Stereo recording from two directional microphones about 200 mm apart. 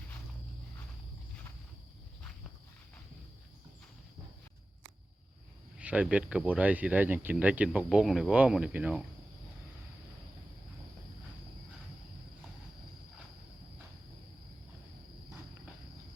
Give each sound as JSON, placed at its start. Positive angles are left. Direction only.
{"t": 5.7, "sound": "speech", "side_deg": -5}